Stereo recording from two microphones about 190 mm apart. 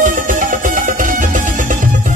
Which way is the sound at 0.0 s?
45° right (ahead or behind).